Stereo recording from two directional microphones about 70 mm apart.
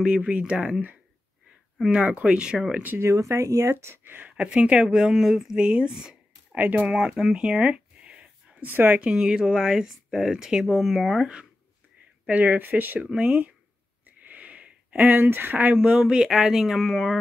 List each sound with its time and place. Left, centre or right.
0.0 s speech: centre
3.0 s speech: right
3.8 s speech: right; by 7.2 s centre
7.3 s a sound: centre
9.0 s speech: centre
12.3 s speech: right
14.0 s wheeze: right
15.0 s speech: right; by 17.2 s centre